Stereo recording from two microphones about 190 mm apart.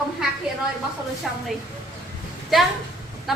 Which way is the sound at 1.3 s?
Centre (ahead or behind).